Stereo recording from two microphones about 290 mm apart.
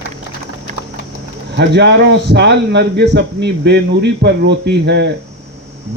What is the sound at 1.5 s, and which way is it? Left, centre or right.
A man's voice, right.